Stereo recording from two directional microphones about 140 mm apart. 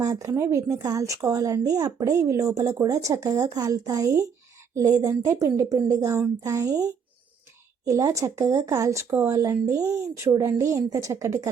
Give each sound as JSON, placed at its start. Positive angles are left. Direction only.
{"t": 0.0, "sound": "speech", "side_deg": -25}